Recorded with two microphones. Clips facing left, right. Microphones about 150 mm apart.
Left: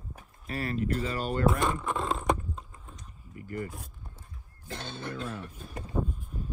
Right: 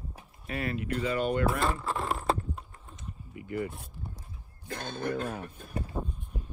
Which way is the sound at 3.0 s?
40° left (ahead or behind).